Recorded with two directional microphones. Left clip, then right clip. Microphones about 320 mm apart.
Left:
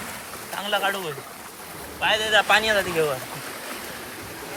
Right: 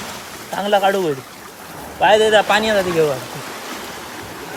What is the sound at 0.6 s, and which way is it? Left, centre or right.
Speech, centre.